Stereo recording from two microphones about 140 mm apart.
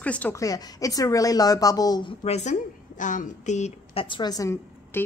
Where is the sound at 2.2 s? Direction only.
50° left (ahead or behind).